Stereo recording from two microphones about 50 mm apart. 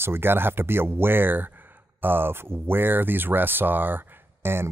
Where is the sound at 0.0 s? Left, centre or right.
Right.